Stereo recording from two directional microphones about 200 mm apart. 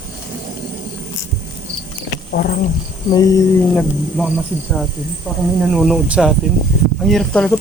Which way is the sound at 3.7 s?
Centre (ahead or behind).